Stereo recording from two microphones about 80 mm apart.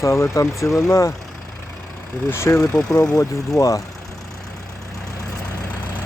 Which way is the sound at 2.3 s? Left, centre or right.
Left.